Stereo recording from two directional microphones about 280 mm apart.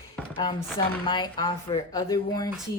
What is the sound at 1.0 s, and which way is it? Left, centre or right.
Speech, centre.